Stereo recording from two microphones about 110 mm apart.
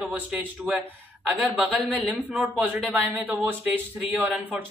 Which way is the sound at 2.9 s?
15° right (ahead or behind).